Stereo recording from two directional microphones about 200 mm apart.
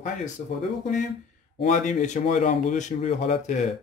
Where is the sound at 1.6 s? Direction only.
35° left (ahead or behind).